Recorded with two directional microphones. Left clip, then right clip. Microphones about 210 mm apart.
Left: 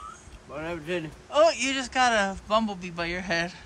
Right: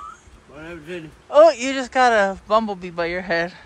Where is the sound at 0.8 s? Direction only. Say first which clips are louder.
Left 1 dB; 5° left (ahead or behind).